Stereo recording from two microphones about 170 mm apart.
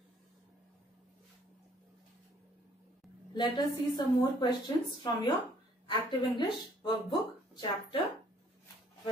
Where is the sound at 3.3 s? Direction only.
25° left (ahead or behind).